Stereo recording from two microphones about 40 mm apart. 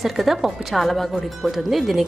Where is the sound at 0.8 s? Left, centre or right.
Centre.